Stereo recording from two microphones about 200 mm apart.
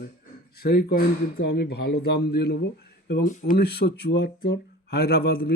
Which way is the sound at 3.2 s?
40° left (ahead or behind).